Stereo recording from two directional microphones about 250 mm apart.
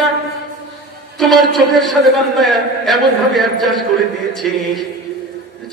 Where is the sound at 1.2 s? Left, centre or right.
Centre.